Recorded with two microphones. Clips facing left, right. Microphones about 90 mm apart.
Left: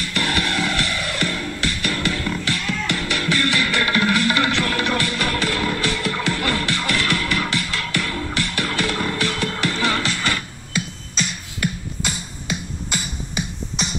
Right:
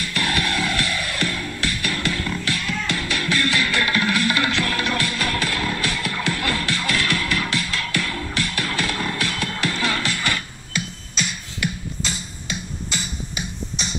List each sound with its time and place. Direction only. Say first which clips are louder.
0.1 s music: left 1 dB; 25° left (ahead or behind)